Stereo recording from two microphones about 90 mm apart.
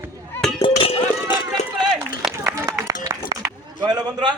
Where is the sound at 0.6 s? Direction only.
90° left.